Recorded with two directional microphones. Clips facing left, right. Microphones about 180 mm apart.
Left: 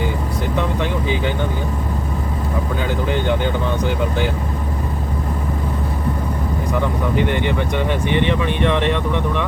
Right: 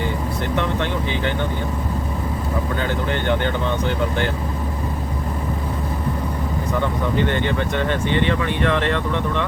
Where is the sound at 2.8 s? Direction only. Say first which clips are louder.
Left 4 dB; 10° left (ahead or behind).